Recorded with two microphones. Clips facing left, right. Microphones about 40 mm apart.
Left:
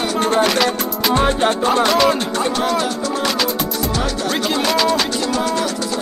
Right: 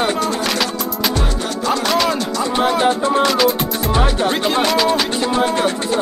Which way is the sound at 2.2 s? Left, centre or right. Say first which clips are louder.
Left 1 dB; left.